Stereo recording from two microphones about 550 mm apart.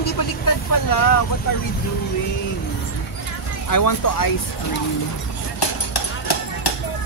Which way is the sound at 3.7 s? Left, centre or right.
Left.